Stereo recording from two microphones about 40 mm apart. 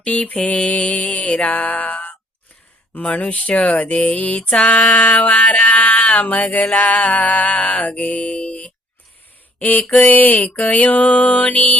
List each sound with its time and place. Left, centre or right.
0.0 s music: left
3.5 s speech: left
3.8 s music: left
4.9 s mantra: left
5.4 s a sound: left
6.1 s music: left
9.6 s a sound: left
9.8 s a sound: centre
10.1 s music: left